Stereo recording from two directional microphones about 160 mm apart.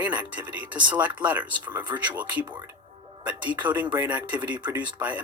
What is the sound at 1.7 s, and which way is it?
Speech, 25° right (ahead or behind).